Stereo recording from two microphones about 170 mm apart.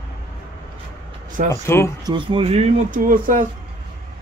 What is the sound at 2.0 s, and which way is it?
Speech, 30° right (ahead or behind).